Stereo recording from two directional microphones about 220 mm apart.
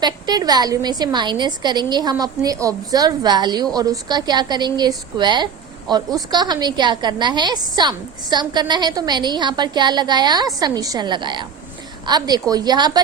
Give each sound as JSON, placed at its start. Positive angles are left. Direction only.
{"t": 0.0, "sound": "a woman's voice", "side_deg": -20}